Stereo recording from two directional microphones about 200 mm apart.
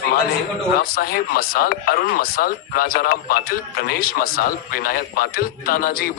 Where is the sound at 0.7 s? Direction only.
45° left (ahead or behind).